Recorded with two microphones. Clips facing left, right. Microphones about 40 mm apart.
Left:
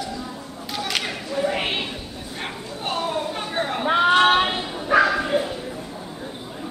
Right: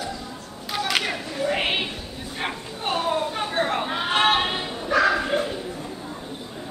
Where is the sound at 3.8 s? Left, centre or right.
Centre.